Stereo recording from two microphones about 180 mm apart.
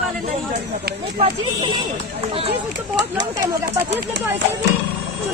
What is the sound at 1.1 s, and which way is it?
Speech, 30° right (ahead or behind).